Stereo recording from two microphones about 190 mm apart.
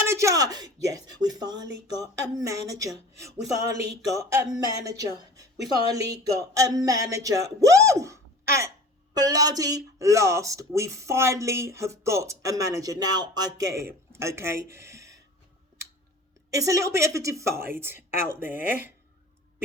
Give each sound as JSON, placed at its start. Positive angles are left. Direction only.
{"t": 0.0, "sound": "dishes", "side_deg": -15}
{"t": 1.9, "sound": "speech", "side_deg": -20}
{"t": 16.5, "sound": "speech", "side_deg": -15}